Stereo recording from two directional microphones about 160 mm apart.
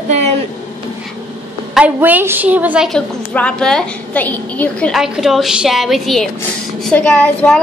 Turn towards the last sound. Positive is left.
turn(degrees=10)  # may be behind; listen again after turning